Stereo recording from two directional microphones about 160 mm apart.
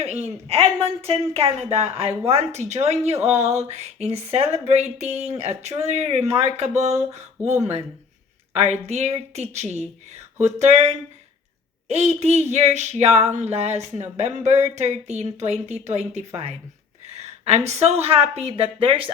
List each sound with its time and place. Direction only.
0.0 s a woman's voice: 40° right (ahead or behind)